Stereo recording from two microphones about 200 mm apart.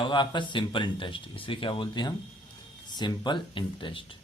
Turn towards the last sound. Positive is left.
turn(degrees=25)  # may be behind; listen again after turning